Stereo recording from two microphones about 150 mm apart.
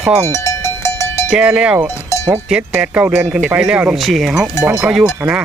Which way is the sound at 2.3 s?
5° right (ahead or behind).